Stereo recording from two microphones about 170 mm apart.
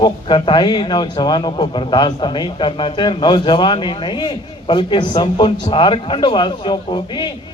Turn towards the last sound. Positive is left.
turn(degrees=25)  # may be behind; listen again after turning